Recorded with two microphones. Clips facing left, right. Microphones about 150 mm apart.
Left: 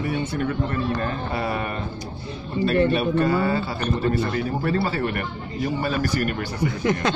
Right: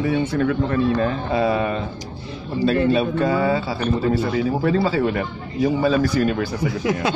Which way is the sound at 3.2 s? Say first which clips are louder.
Right 2 dB; 90° right.